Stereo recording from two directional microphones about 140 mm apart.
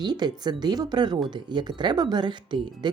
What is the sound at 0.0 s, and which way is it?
Speech, 30° right (ahead or behind).